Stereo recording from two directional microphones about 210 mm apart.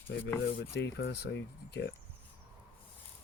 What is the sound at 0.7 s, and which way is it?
Speech, 55° left (ahead or behind).